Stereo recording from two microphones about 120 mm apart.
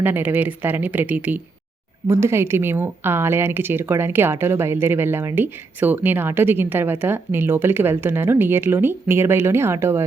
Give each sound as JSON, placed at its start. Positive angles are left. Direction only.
{"t": 0.0, "sound": "a woman's voice", "side_deg": -15}